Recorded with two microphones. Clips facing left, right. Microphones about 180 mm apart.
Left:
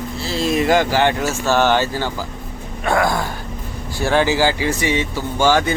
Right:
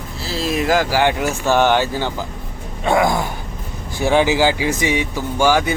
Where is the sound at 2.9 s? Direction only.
20° right (ahead or behind).